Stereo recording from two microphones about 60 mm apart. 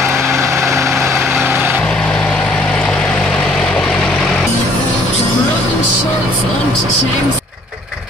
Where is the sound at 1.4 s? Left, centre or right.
Right.